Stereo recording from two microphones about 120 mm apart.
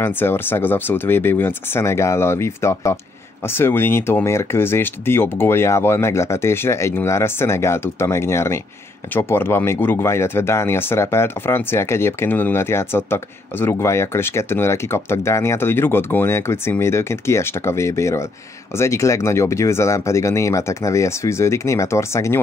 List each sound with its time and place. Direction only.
0.0 s speech: 20° left (ahead or behind)